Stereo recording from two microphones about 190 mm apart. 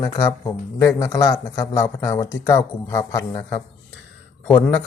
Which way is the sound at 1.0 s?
15° left (ahead or behind).